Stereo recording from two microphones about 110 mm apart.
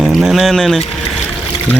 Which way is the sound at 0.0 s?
5° right (ahead or behind).